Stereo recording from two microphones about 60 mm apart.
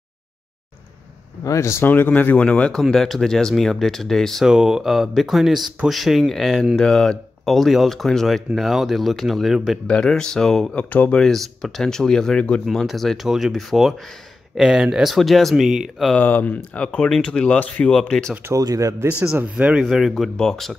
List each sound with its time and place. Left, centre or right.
1.4 s speech: left
1.8 s speech: left; by 2.8 s centre
2.8 s speech: centre
4.5 s speech: centre
9.8 s speech: centre
10.7 s speech: left
11.1 s speech: centre
12.6 s speech: centre
16.2 s speech: left
16.7 s speech: centre
18.5 s speech: right
18.9 s speech: right
19.8 s speech: centre